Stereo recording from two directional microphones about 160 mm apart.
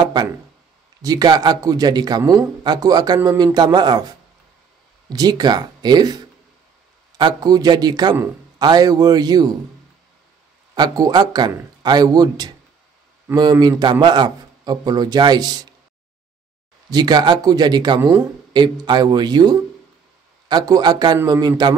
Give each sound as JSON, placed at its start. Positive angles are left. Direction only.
{"t": 0.0, "sound": "a sound", "side_deg": -25}
{"t": 1.0, "sound": "a man's voice", "side_deg": -25}
{"t": 5.1, "sound": "a man's voice", "side_deg": -25}
{"t": 10.7, "sound": "a man's voice", "side_deg": -25}
{"t": 16.9, "sound": "a man's voice", "side_deg": -25}